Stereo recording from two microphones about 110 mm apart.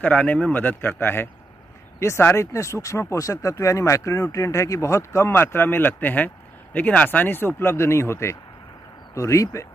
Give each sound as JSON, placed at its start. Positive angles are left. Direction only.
{"t": 0.0, "sound": "speech", "side_deg": 15}